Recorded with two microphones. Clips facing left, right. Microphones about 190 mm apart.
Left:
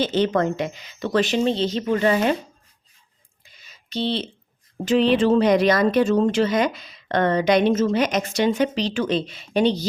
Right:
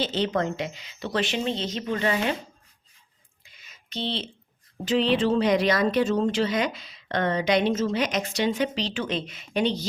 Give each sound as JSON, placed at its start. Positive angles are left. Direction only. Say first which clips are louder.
{"t": 0.0, "sound": "speech", "louder": "left 5 dB", "side_deg": 50}
{"t": 3.4, "sound": "a sound", "louder": "left 2 dB", "side_deg": 35}
{"t": 4.9, "sound": "speech", "louder": "left 5 dB", "side_deg": 50}